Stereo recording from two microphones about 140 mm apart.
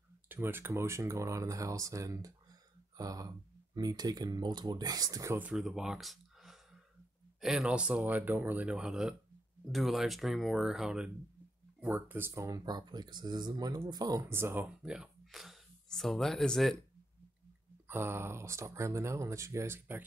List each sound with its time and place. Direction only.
0.3 s speech: 15° right (ahead or behind)
5.4 s speech: 5° right (ahead or behind)
17.8 s speech: 15° right (ahead or behind)